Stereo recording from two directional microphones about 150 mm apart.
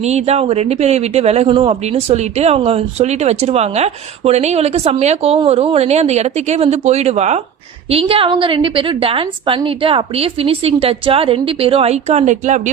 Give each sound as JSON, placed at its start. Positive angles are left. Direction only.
{"t": 0.0, "sound": "a woman's voice", "side_deg": -45}